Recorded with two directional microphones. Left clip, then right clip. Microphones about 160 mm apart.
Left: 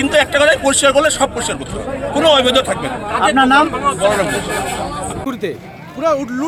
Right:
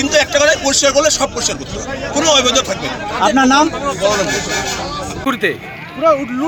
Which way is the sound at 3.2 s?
85° right.